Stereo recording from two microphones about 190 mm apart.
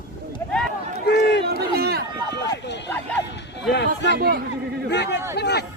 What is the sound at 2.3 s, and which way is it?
Run, 60° left (ahead or behind).